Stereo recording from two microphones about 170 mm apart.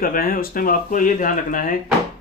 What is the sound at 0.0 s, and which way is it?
Speech, 55° left (ahead or behind).